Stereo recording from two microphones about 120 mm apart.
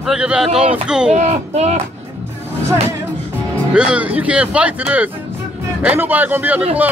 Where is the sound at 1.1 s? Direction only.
65° right (ahead or behind).